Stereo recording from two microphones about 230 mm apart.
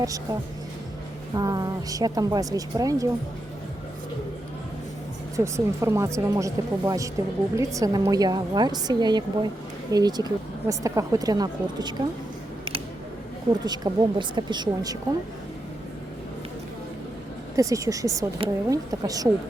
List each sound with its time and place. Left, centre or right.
0.0 s speech: centre
1.4 s speech: centre
5.4 s speech: centre
13.7 s speech: centre
17.6 s speech: centre